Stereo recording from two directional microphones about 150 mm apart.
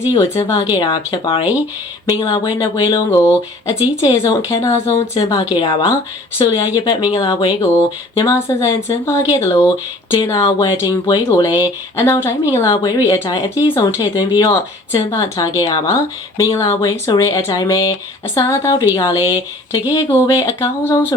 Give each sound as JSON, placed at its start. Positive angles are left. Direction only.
{"t": 0.1, "sound": "a woman's voice", "side_deg": 30}